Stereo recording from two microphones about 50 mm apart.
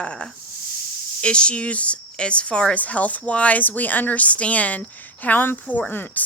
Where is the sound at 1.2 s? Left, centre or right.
Centre.